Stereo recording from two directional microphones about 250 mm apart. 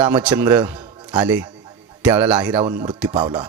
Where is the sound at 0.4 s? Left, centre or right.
Centre.